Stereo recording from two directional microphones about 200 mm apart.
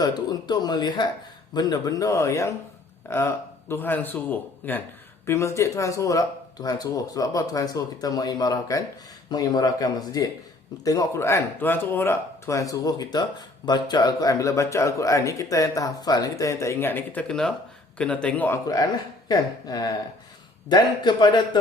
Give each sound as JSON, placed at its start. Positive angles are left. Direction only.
{"t": 0.0, "sound": "speech", "side_deg": 20}